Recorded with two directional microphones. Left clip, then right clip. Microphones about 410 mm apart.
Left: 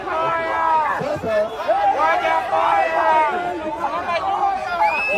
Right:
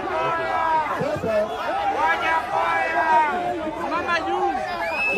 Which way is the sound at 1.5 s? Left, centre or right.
Centre.